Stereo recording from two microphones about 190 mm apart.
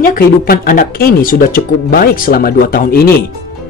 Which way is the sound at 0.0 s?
50° left (ahead or behind).